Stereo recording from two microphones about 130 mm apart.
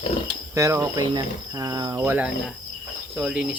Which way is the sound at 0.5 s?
25° right (ahead or behind).